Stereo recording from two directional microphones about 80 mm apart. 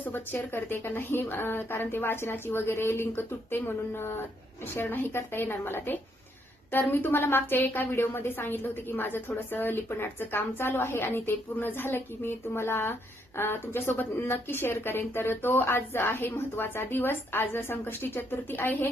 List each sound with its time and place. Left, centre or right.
0.0 s a woman's voice: left